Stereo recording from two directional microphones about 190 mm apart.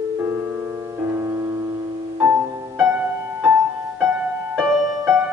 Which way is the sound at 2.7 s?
10° right (ahead or behind).